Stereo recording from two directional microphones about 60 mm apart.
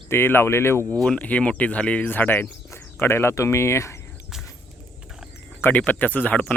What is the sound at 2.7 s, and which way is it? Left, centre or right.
Speech, left.